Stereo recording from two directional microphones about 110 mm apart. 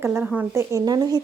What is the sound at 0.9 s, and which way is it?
Speech, 35° right (ahead or behind).